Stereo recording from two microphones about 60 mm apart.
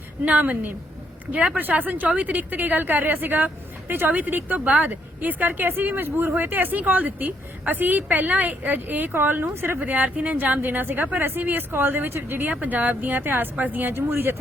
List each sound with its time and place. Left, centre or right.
0.3 s a woman's voice: right
12.5 s speech: right